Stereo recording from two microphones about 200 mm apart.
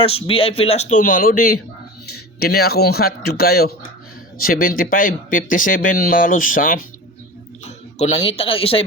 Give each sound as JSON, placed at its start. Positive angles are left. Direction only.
{"t": 0.0, "sound": "speech", "side_deg": 30}
{"t": 7.6, "sound": "speech", "side_deg": 35}